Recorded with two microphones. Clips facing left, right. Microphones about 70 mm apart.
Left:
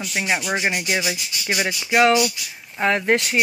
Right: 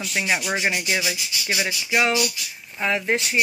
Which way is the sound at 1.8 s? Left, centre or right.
Left.